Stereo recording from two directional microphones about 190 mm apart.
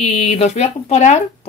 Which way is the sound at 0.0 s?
35° left (ahead or behind).